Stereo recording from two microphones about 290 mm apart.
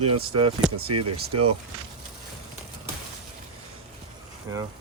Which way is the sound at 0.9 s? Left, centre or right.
Right.